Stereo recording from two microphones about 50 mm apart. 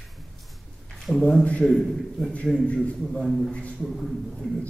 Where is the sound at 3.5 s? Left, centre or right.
Left.